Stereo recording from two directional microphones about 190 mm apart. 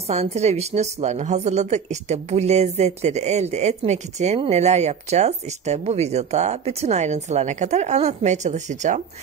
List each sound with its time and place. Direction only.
0.1 s a woman's voice: 35° right (ahead or behind)